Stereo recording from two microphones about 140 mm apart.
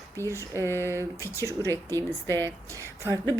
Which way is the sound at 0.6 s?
15° left (ahead or behind).